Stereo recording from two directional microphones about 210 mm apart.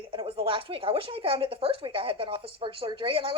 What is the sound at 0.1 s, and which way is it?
Speech, 25° right (ahead or behind).